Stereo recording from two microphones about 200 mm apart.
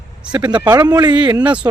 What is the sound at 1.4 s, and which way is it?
Speech, 5° right (ahead or behind).